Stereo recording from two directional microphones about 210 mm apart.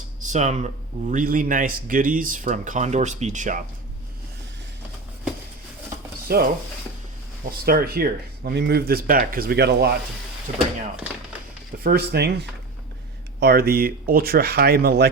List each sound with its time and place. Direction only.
0.2 s speech: 35° right (ahead or behind)
6.2 s speech: 45° right (ahead or behind)
7.6 s speech: 45° right (ahead or behind)
11.8 s speech: 45° right (ahead or behind)
13.4 s speech: 50° right (ahead or behind)